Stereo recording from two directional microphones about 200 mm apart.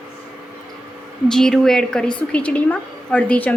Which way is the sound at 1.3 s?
Centre (ahead or behind).